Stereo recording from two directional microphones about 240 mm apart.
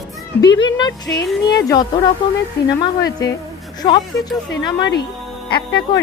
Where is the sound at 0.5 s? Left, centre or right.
Centre.